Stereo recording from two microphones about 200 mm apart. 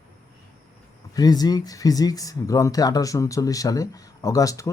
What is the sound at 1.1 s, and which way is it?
Speech, 20° left (ahead or behind).